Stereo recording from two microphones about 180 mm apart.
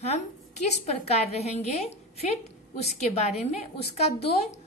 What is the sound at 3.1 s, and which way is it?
A woman's voice, 35° left (ahead or behind).